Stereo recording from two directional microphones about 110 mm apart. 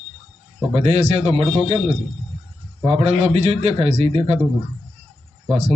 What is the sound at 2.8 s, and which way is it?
A man's voice, 65° right (ahead or behind).